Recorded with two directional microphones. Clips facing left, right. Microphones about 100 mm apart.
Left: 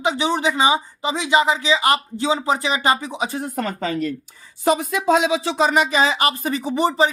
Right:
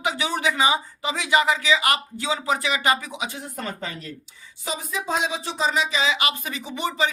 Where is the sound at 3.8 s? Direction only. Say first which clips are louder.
Left 11 dB; 90° left.